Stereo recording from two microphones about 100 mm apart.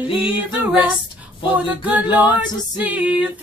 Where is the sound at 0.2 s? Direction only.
15° right (ahead or behind).